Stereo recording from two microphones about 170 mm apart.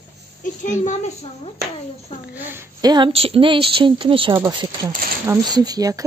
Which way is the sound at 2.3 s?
10° right (ahead or behind).